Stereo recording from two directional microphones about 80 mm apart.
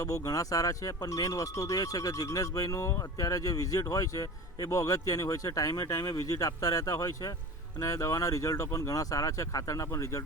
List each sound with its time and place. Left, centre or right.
0.0 s speech: left